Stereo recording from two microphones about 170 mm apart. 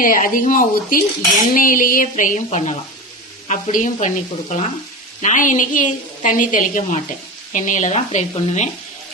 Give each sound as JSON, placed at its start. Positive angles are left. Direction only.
{"t": 0.0, "sound": "a woman's voice", "side_deg": 55}